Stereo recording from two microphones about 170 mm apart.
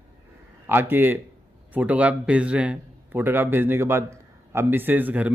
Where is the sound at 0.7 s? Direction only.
10° right (ahead or behind).